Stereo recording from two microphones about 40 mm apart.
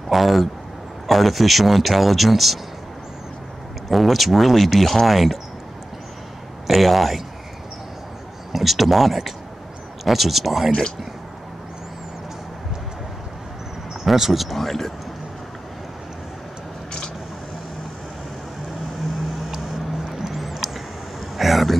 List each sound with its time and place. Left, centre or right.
0.1 s speech: centre
3.9 s speech: centre
6.7 s speech: centre
8.5 s speech: centre
14.0 s speech: centre
20.2 s a sound: centre